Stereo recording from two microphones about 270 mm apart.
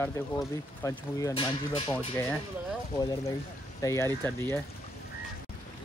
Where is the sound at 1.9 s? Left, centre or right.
Centre.